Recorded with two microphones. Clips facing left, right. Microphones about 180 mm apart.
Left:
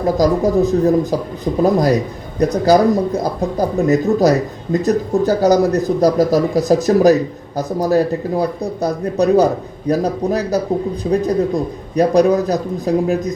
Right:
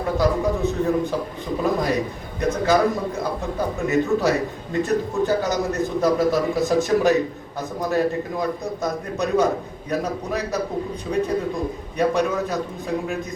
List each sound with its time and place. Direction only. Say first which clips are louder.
0.0 s a man's voice: left 6 dB; 40° left (ahead or behind)